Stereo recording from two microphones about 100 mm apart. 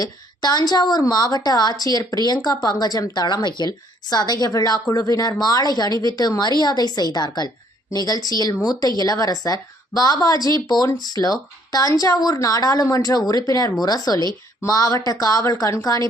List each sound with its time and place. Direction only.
0.0 s a woman's voice: 40° left (ahead or behind)